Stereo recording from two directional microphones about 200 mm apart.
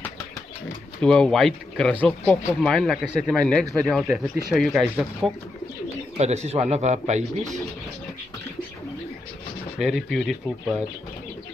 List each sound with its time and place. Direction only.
1.0 s speech: 5° left (ahead or behind)
3.6 s a man's voice: 15° right (ahead or behind)
4.6 s speech: centre (ahead or behind)
6.1 s speech: 35° right (ahead or behind)
9.8 s speech: centre (ahead or behind)